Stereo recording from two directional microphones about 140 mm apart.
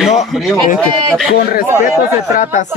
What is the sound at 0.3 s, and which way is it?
Speech, centre (ahead or behind).